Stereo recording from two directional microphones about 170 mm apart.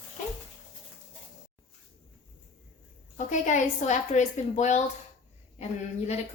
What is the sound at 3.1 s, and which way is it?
A woman's voice, 45° left (ahead or behind).